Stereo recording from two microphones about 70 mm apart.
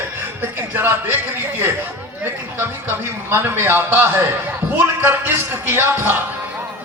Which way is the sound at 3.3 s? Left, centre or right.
Right.